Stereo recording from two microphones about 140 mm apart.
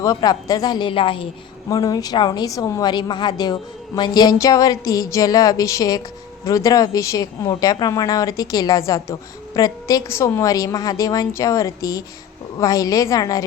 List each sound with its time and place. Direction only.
0.0 s a woman's voice: 25° left (ahead or behind)
1.7 s a woman's voice: 25° left (ahead or behind)